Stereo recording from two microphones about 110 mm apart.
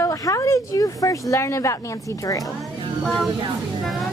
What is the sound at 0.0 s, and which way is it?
Speech, 30° left (ahead or behind).